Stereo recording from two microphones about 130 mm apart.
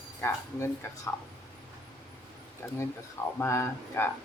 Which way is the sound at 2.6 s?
20° left (ahead or behind).